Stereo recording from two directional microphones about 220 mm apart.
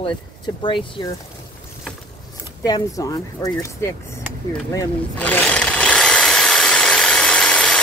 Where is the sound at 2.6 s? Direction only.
15° left (ahead or behind).